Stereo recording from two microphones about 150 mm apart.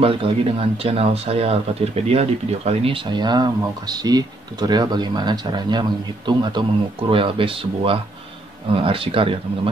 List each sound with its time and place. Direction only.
0.0 s speech: 40° right (ahead or behind)